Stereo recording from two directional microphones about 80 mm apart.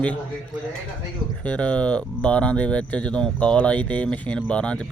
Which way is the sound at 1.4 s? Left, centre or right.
Centre.